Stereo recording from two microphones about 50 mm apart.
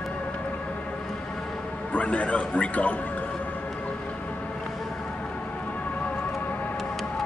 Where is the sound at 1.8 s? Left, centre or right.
Left.